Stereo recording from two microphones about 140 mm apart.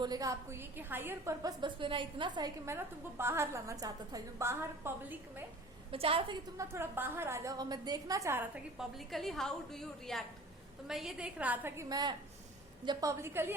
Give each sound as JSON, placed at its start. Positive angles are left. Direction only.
{"t": 0.0, "sound": "a woman's voice", "side_deg": -25}
{"t": 2.6, "sound": "a woman's voice", "side_deg": -20}
{"t": 5.9, "sound": "a woman's voice", "side_deg": -40}
{"t": 6.6, "sound": "a woman's voice", "side_deg": -15}
{"t": 8.8, "sound": "a woman's voice", "side_deg": 0}